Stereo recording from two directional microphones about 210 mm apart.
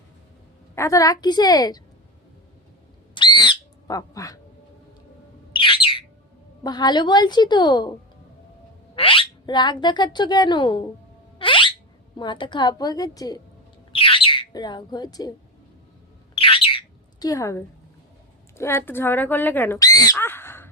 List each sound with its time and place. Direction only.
0.8 s a woman's voice: 15° left (ahead or behind)
3.2 s bird: 20° left (ahead or behind)
5.5 s bird: 25° left (ahead or behind)
6.6 s speech: 20° left (ahead or behind)
9.0 s speech: 25° left (ahead or behind)
11.3 s a sound: 25° left (ahead or behind)
12.1 s speech: 20° left (ahead or behind)
13.9 s bird: 25° left (ahead or behind)
16.3 s bird: 25° left (ahead or behind)
18.5 s speech: 10° left (ahead or behind)